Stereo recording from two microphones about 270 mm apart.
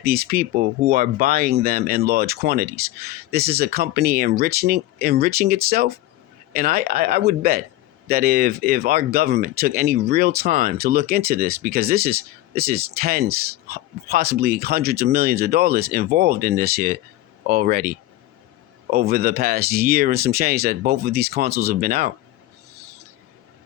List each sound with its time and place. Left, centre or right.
0.0 s speech: right